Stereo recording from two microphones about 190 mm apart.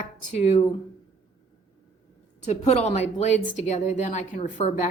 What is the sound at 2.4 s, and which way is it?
A woman's voice, 35° left (ahead or behind).